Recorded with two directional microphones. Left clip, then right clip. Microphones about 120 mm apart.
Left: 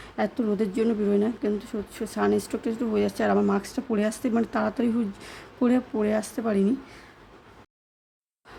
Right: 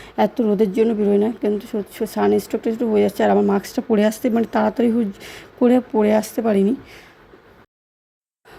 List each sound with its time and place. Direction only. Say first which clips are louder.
0.0 s speech: right 9 dB; 35° right (ahead or behind)
6.0 s speech: right 9 dB; 45° right (ahead or behind)